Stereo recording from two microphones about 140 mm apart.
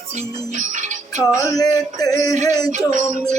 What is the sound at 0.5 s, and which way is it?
Music, 60° right (ahead or behind).